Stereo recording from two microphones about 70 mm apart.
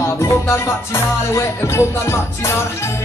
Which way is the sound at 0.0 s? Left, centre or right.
Left.